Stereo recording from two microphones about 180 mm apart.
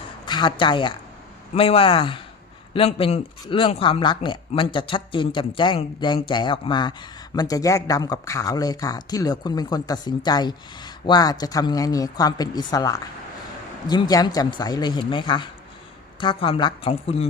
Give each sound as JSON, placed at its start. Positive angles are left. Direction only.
{"t": 0.3, "sound": "speech", "side_deg": 25}